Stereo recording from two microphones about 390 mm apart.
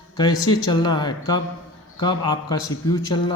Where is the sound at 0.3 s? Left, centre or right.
Left.